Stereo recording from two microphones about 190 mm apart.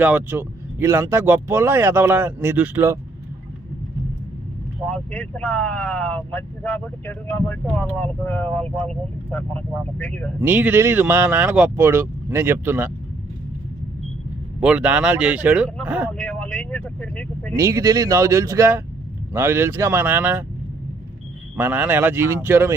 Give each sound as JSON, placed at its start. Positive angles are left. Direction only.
{"t": 0.0, "sound": "speech", "side_deg": -10}
{"t": 5.1, "sound": "speech", "side_deg": 10}
{"t": 10.4, "sound": "speech", "side_deg": -10}
{"t": 14.6, "sound": "speech", "side_deg": -5}
{"t": 16.0, "sound": "speech", "side_deg": 5}
{"t": 17.6, "sound": "speech", "side_deg": -15}
{"t": 21.5, "sound": "speech", "side_deg": -5}